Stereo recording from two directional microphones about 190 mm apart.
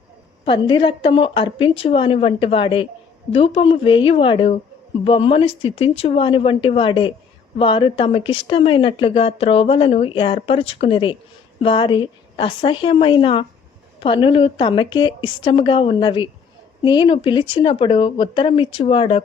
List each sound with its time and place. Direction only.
0.4 s speech: 25° left (ahead or behind)